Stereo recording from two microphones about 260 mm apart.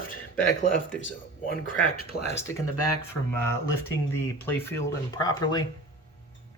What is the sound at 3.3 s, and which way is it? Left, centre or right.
Speech, centre.